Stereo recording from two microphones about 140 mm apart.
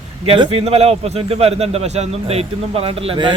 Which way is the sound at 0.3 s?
45° right (ahead or behind).